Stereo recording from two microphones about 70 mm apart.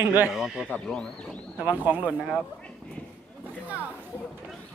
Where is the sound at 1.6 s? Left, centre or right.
Right.